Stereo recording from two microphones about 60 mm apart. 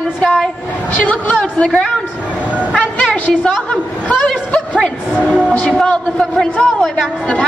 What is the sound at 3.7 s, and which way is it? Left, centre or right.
Speech, left.